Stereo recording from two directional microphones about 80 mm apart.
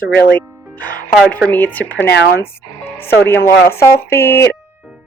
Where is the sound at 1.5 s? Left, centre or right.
Left.